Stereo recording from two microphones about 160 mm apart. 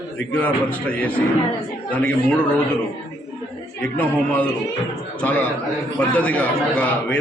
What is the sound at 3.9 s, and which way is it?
A man's voice, 10° left (ahead or behind).